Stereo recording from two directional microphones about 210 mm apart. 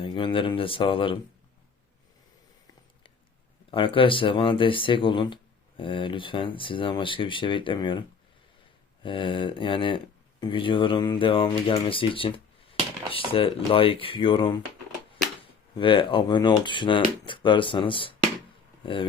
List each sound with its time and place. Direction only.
0.0 s speech: 25° left (ahead or behind)
3.7 s speech: 25° left (ahead or behind)
9.0 s speech: 25° left (ahead or behind)
15.8 s speech: 25° left (ahead or behind)